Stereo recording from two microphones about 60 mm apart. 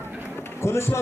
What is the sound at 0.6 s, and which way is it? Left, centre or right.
Run, left.